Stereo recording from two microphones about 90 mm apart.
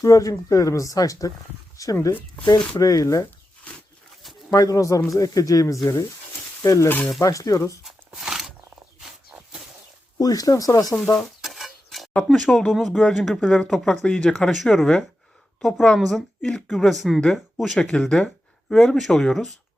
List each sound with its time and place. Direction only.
0.0 s speech: 40° left (ahead or behind)
2.5 s speech: 55° left (ahead or behind)
4.5 s speech: 40° left (ahead or behind)
7.9 s shuffling cards: 5° right (ahead or behind)
9.0 s a sound: 5° right (ahead or behind)
10.2 s speech: 45° left (ahead or behind)
11.2 s a sound: centre (ahead or behind)
12.3 s speech: 5° left (ahead or behind)
14.5 s speech: centre (ahead or behind)